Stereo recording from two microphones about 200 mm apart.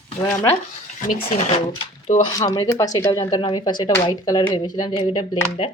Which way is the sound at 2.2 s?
20° left (ahead or behind).